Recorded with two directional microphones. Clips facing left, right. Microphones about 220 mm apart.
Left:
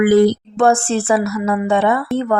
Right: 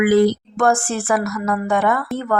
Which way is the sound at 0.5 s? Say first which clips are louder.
Left 5 dB; 25° left (ahead or behind).